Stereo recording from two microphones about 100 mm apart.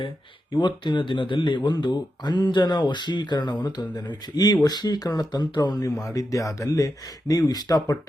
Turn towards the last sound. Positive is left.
turn(degrees=40)  # may be behind; listen again after turning